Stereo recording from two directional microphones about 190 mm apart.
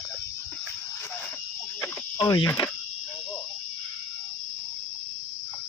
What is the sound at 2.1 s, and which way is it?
Speech, 25° left (ahead or behind).